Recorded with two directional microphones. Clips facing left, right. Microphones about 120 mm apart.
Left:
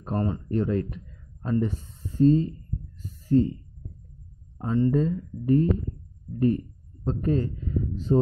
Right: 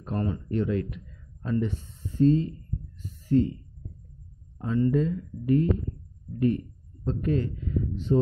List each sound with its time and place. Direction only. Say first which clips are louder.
0.0 s speech: left 2 dB; 35° left (ahead or behind)
3.0 s a sound: left 2 dB; 35° left (ahead or behind)
4.6 s a man's voice: left 1 dB; 30° left (ahead or behind)